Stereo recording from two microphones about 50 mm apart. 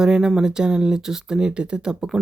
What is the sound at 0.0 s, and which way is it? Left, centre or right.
Speech, centre.